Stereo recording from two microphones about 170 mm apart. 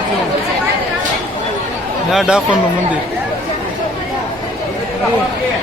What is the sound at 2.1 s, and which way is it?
Speech, 5° right (ahead or behind).